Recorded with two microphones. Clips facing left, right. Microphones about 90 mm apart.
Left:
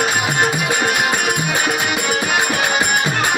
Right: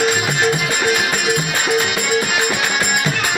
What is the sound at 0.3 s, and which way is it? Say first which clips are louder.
Music: even; 45° left (ahead or behind).